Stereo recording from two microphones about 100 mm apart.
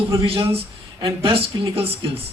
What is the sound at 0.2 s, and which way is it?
Speech, 70° right (ahead or behind).